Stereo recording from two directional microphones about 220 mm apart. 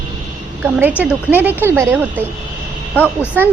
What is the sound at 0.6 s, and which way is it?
A woman's voice, 10° right (ahead or behind).